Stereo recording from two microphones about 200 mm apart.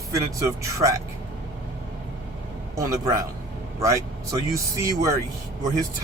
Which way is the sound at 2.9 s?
15° right (ahead or behind).